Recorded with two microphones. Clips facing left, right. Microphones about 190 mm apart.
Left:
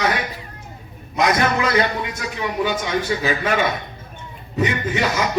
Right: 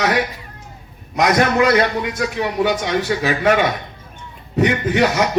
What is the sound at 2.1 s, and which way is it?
A man's voice, 65° right (ahead or behind).